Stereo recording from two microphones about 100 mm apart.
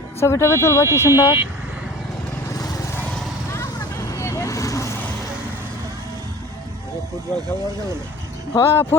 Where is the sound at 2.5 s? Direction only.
35° left (ahead or behind).